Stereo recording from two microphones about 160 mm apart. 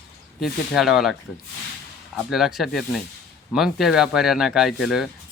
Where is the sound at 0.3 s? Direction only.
Centre (ahead or behind).